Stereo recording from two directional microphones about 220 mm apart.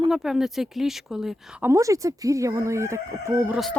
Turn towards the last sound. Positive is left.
turn(degrees=0)  # may be behind; listen again after turning